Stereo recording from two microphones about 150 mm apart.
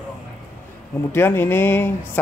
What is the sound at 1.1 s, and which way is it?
Speech, 15° left (ahead or behind).